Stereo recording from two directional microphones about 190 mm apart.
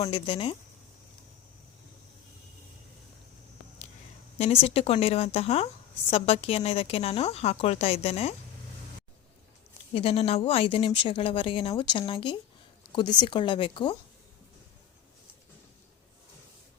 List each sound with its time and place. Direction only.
0.0 s a woman's voice: 25° left (ahead or behind)
4.4 s speech: 35° left (ahead or behind)
9.9 s a woman's voice: 30° left (ahead or behind)